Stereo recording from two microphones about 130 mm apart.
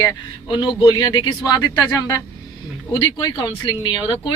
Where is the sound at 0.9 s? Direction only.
35° left (ahead or behind).